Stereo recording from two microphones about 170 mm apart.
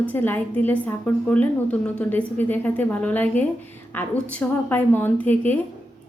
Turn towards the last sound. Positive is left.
turn(degrees=10)  # may be behind; listen again after turning